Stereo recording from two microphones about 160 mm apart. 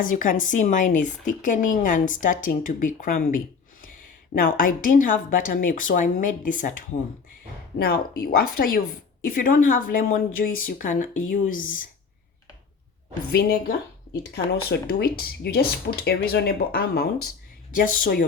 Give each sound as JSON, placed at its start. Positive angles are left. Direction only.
{"t": 0.0, "sound": "a woman's voice", "side_deg": 55}
{"t": 7.8, "sound": "a woman's voice", "side_deg": 70}
{"t": 13.3, "sound": "speech", "side_deg": 70}
{"t": 14.3, "sound": "a woman's voice", "side_deg": 80}